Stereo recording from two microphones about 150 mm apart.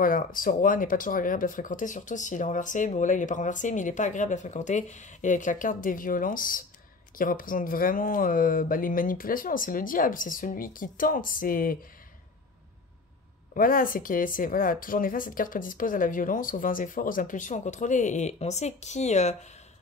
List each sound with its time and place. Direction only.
0.0 s speech: 65° left (ahead or behind)
13.6 s speech: 70° left (ahead or behind); by 19.3 s 50° left (ahead or behind)